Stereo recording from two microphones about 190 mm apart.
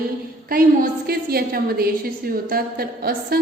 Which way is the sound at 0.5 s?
50° right (ahead or behind).